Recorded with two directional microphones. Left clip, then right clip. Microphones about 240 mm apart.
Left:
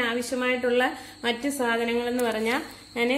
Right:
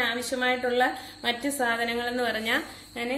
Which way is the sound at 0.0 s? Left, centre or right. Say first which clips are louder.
Even; left.